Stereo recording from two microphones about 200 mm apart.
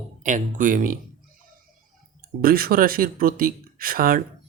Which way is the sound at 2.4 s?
50° right (ahead or behind).